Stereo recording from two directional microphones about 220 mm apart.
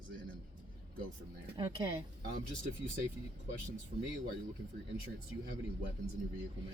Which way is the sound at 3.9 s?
40° right (ahead or behind).